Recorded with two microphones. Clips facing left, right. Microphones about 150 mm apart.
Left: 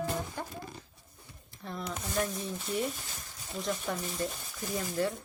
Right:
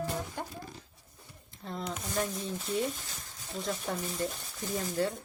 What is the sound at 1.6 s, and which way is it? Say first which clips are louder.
Speech: right 1 dB; 25° right (ahead or behind).